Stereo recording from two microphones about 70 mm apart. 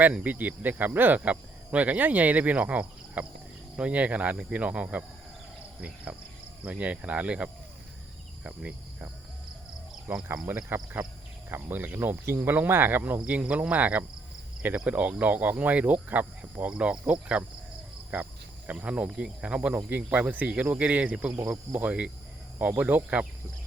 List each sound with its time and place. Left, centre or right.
0.0 s speech: right
6.7 s speech: centre
8.4 s cricket: centre
10.2 s speech: right; by 21.3 s centre
21.3 s speech: right
21.7 s speech: right
22.5 s speech: right